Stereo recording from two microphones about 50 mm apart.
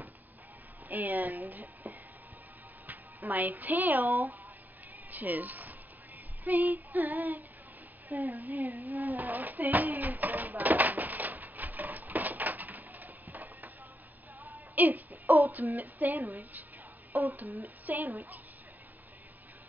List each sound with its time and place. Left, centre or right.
0.8 s female singing: right
2.9 s speech: right
6.4 s female singing: right
8.1 s a sound: right
14.4 s speech: right
17.4 s female singing: right